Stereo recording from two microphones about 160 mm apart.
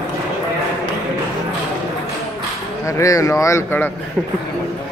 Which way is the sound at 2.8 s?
20° left (ahead or behind).